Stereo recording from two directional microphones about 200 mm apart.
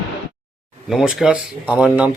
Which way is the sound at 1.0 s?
5° right (ahead or behind).